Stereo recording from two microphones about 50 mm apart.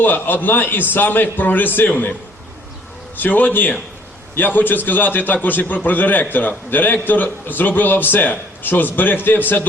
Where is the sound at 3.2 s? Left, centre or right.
Left.